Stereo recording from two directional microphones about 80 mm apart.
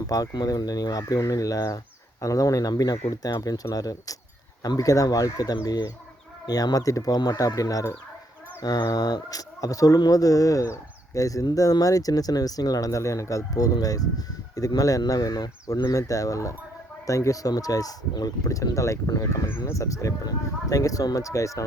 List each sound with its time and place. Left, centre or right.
0.1 s speech: left